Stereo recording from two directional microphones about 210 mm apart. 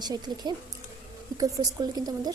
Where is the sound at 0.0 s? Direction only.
20° right (ahead or behind).